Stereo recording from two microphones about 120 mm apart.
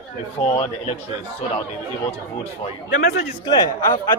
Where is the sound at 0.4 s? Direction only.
60° left (ahead or behind).